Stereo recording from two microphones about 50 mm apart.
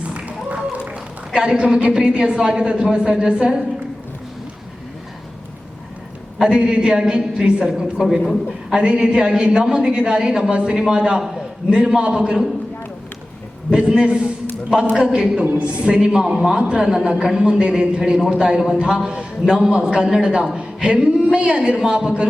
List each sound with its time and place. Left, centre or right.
0.0 s a sound: right
1.3 s a woman's voice: centre
6.4 s a woman's voice: centre
13.7 s a woman's voice: right
20.8 s a sound: right
21.3 s a woman's voice: centre